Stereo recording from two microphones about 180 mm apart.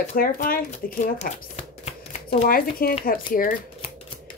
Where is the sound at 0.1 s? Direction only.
50° left (ahead or behind).